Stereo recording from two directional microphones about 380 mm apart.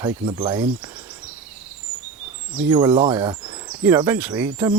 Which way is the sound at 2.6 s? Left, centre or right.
Centre.